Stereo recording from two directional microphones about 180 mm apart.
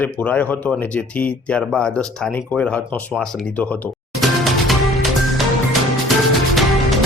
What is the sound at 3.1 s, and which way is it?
Music, 5° left (ahead or behind).